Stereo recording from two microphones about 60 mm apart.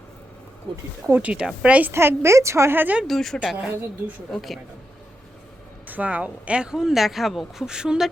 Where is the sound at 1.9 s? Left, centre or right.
Right.